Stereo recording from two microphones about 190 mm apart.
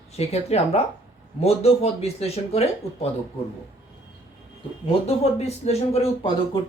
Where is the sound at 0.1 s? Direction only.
35° left (ahead or behind).